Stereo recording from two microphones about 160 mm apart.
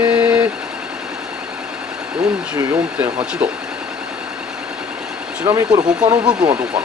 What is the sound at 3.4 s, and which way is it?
Speech, 10° right (ahead or behind).